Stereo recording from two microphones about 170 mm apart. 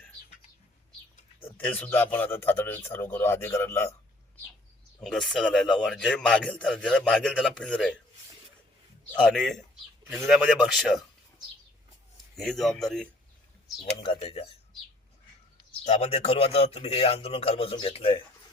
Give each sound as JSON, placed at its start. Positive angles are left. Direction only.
{"t": 1.5, "sound": "a man's voice", "side_deg": 10}
{"t": 4.9, "sound": "speech", "side_deg": 0}
{"t": 9.2, "sound": "speech", "side_deg": 5}
{"t": 12.4, "sound": "speech", "side_deg": 0}
{"t": 13.9, "sound": "a man's voice", "side_deg": 35}
{"t": 15.8, "sound": "a man's voice", "side_deg": 40}